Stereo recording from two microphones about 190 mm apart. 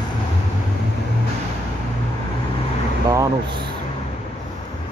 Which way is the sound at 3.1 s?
20° right (ahead or behind).